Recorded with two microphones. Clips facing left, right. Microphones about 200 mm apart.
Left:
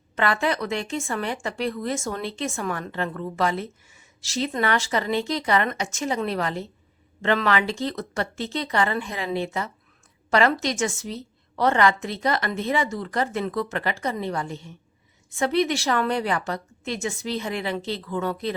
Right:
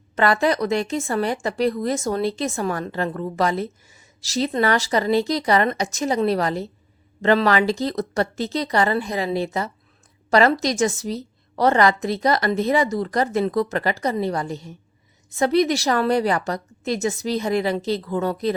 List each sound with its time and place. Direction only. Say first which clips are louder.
0.2 s a woman's voice: right 5 dB; 40° right (ahead or behind)